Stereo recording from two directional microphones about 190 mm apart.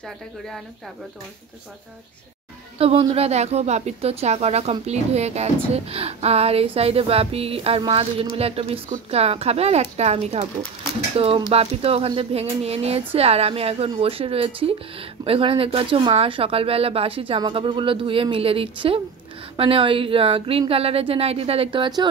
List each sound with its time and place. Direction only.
2.8 s a woman's voice: 30° right (ahead or behind)